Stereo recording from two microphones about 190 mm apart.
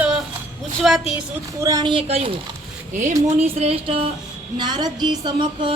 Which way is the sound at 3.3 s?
35° right (ahead or behind).